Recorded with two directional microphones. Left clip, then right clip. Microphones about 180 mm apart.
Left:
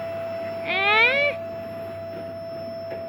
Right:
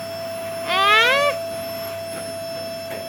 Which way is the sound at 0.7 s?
10° right (ahead or behind).